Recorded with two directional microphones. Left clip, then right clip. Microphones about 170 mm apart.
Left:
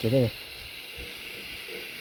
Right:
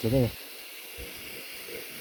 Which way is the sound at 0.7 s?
30° right (ahead or behind).